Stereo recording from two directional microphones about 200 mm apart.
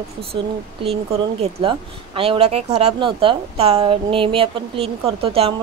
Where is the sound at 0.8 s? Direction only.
30° right (ahead or behind).